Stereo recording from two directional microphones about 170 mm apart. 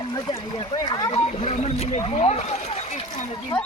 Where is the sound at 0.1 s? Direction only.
25° left (ahead or behind).